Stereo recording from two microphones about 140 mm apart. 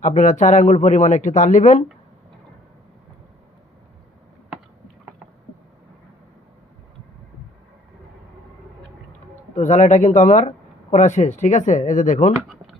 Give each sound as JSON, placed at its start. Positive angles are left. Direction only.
{"t": 0.0, "sound": "speech", "side_deg": 60}
{"t": 9.6, "sound": "speech", "side_deg": 55}